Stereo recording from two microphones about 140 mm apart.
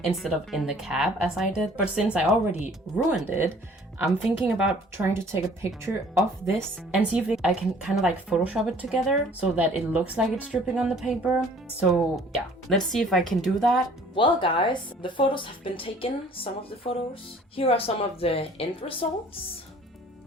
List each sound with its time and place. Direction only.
0.0 s speech: centre (ahead or behind)
5.1 s speech: 20° right (ahead or behind)
7.1 s speech: 10° right (ahead or behind)
14.2 s a woman's voice: 35° left (ahead or behind)